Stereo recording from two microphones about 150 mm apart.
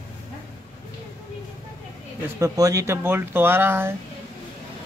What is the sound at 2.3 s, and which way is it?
Speech, 20° right (ahead or behind).